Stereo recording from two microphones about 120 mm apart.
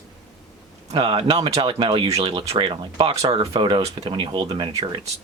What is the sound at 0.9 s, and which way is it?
Speech, 45° right (ahead or behind).